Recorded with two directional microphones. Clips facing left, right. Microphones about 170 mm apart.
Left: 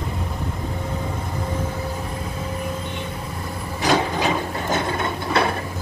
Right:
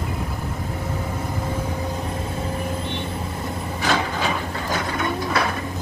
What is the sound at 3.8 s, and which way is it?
Wood, 15° left (ahead or behind).